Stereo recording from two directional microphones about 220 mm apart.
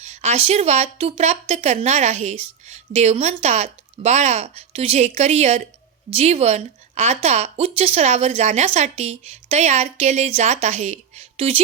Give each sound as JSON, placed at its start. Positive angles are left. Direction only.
{"t": 0.0, "sound": "speech", "side_deg": -30}